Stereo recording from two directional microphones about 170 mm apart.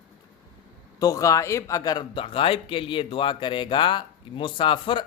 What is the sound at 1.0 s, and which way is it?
Speech, 20° left (ahead or behind).